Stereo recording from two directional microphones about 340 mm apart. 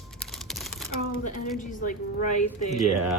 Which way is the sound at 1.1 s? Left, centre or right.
Left.